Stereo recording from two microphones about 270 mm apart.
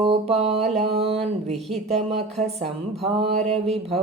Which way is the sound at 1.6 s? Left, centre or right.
Centre.